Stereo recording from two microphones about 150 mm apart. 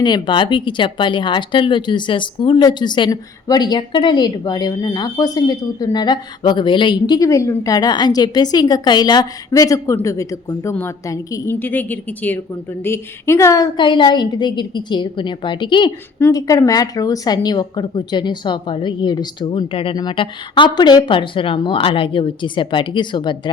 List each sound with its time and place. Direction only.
0.0 s a woman's voice: 30° left (ahead or behind)